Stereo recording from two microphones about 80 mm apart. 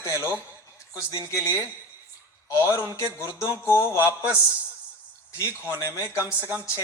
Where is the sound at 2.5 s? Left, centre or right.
Left.